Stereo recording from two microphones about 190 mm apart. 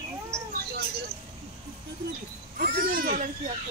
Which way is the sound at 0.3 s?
50° right (ahead or behind).